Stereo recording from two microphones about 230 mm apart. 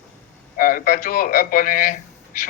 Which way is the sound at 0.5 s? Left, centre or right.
Left.